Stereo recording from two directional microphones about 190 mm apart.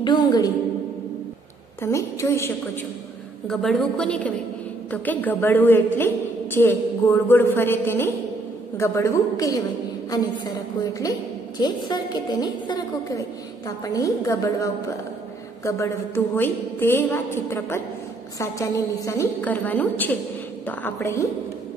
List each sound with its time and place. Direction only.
0.0 s a woman's voice: 20° left (ahead or behind)
1.8 s a woman's voice: 15° left (ahead or behind)
3.4 s a woman's voice: centre (ahead or behind); by 14.7 s 15° left (ahead or behind)
16.3 s a woman's voice: 10° left (ahead or behind)